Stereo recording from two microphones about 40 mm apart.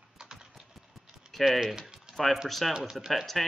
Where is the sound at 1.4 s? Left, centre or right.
Centre.